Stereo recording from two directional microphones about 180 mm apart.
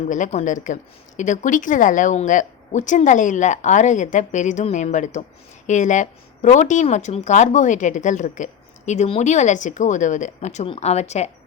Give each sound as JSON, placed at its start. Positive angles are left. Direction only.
{"t": 0.1, "sound": "a woman's voice", "side_deg": 40}